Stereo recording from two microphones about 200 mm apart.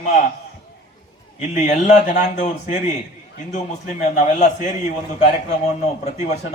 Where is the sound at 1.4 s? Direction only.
35° left (ahead or behind).